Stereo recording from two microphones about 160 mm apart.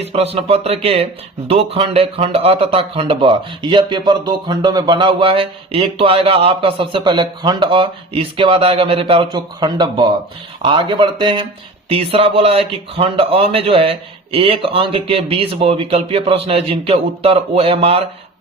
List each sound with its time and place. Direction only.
0.0 s speech: 40° right (ahead or behind)